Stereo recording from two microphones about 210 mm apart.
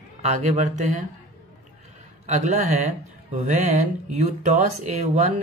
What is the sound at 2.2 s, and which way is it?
Speech, 35° right (ahead or behind).